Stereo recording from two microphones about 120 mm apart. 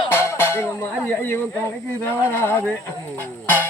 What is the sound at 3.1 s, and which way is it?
Music, 15° left (ahead or behind).